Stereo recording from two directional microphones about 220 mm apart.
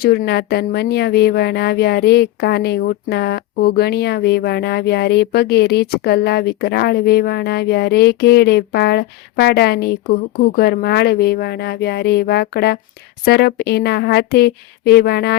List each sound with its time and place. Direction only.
0.0 s speech: 45° left (ahead or behind)